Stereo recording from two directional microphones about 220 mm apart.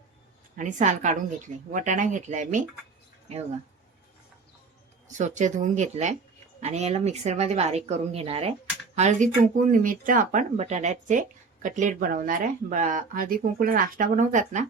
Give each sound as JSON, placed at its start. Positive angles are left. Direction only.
{"t": 0.5, "sound": "speech", "side_deg": -35}
{"t": 5.0, "sound": "speech", "side_deg": -35}